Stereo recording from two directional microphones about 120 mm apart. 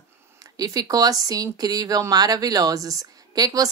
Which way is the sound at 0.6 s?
30° right (ahead or behind).